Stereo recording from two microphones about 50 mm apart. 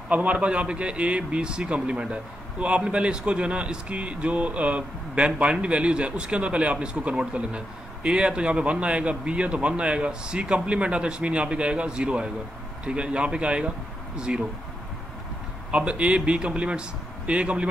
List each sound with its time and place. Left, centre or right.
0.1 s a man's voice: right
15.7 s a man's voice: right